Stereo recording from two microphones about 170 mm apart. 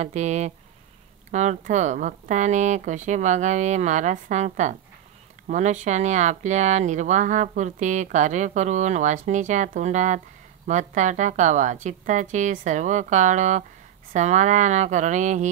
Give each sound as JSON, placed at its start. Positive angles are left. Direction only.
{"t": 0.0, "sound": "speech", "side_deg": -40}